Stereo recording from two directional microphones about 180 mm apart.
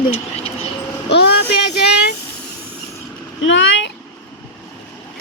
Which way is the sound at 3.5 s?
90° left.